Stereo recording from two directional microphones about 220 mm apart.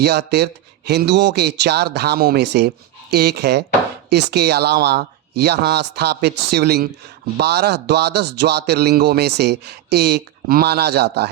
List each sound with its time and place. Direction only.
0.0 s speech: 50° right (ahead or behind)